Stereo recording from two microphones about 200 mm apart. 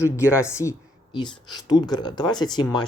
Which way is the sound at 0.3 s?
15° left (ahead or behind).